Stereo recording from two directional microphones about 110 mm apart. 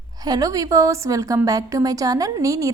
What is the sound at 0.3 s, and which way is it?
A woman's voice, 35° right (ahead or behind).